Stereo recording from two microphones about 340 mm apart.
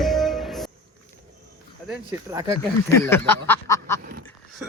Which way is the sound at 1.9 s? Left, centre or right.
Centre.